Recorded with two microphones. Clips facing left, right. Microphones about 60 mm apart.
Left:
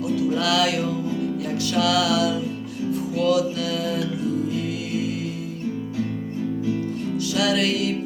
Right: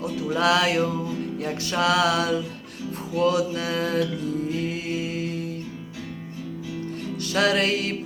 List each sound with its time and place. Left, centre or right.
0.2 s music: right
7.3 s music: right